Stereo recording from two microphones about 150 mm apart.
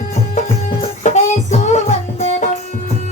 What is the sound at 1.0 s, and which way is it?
Music, 55° left (ahead or behind).